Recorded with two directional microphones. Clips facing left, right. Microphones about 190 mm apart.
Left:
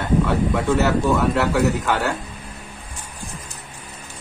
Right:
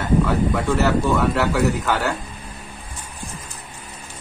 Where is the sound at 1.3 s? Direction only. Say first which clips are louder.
Left 1 dB; centre (ahead or behind).